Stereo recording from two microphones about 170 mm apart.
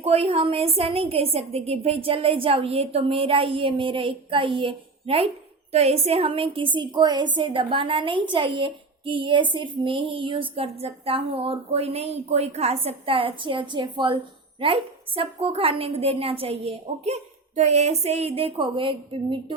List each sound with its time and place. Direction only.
0.0 s a woman's voice: 35° right (ahead or behind)